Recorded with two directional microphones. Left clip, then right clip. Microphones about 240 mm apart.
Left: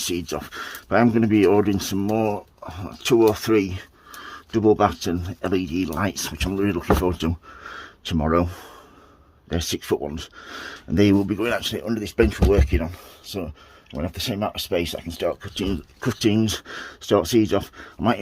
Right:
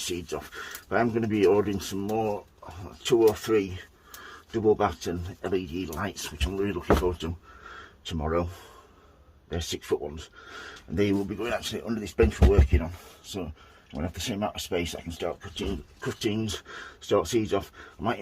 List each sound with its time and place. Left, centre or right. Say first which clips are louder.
0.1 s speech: left 6 dB; left
13.9 s speech: left 5 dB; left